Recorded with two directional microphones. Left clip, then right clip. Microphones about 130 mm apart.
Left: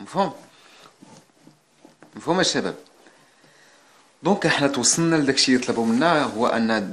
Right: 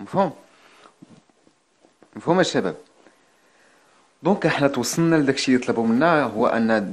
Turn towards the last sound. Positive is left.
turn(degrees=-40)  # may be behind; listen again after turning